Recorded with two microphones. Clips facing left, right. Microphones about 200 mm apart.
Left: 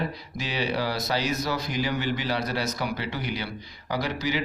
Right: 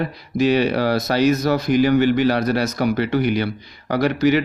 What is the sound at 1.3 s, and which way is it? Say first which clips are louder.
Speech: right 11 dB; 50° right (ahead or behind).